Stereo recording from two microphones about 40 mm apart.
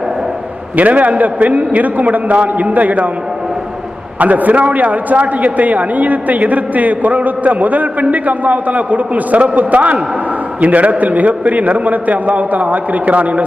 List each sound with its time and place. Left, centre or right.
0.8 s a man's voice: right
4.2 s a man's voice: right